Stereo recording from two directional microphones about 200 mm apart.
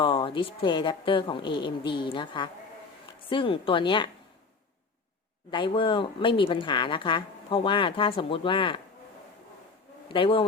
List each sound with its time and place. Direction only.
0.0 s speech: 25° left (ahead or behind)
5.5 s speech: 25° left (ahead or behind)
10.1 s speech: 25° left (ahead or behind)